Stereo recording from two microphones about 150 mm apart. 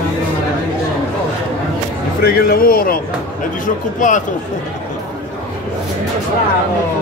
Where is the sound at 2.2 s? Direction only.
85° left.